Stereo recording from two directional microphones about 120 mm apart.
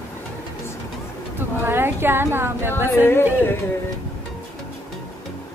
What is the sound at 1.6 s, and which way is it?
A woman's voice, 20° right (ahead or behind).